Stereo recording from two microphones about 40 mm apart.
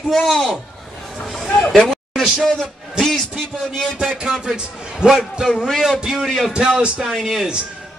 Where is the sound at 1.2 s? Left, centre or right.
Centre.